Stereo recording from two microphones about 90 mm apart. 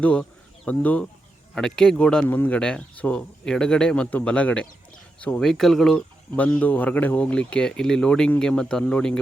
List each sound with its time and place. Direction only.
0.0 s speech: 15° left (ahead or behind)
1.5 s speech: 5° left (ahead or behind)
6.3 s speech: 20° left (ahead or behind)